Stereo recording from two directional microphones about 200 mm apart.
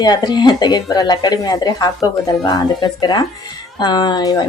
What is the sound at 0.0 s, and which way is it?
Speech, 20° left (ahead or behind).